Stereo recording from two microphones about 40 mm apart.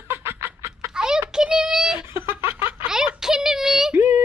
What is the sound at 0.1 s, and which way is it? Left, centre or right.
Chicken, right.